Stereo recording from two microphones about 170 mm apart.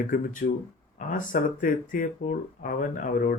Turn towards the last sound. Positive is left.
turn(degrees=55)  # may be behind; listen again after turning